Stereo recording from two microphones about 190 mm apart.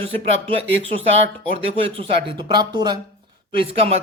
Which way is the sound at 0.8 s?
30° right (ahead or behind).